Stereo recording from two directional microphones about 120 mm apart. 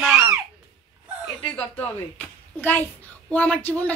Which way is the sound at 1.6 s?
10° left (ahead or behind).